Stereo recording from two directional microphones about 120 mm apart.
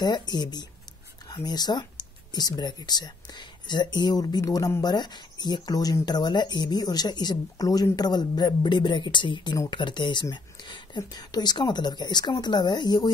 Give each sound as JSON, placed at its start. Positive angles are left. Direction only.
{"t": 0.0, "sound": "speech", "side_deg": 35}